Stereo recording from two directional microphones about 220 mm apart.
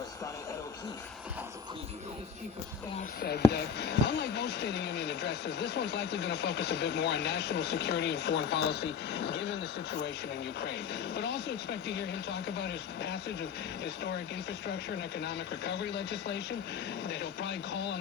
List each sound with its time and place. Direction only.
3.2 s speech: 45° left (ahead or behind)